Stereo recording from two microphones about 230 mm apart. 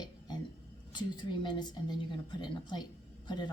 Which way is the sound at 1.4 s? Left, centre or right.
Centre.